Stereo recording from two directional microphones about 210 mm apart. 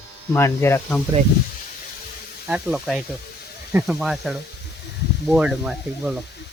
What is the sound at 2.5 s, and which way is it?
Speech, 5° right (ahead or behind).